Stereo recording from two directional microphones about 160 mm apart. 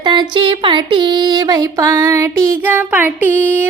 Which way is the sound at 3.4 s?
10° right (ahead or behind).